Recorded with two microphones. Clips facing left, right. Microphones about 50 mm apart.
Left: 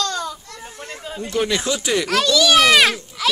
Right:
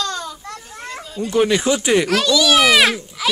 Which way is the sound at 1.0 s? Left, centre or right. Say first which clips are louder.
Right 3 dB; left.